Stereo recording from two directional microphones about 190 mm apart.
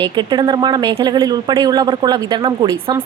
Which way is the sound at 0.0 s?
25° right (ahead or behind).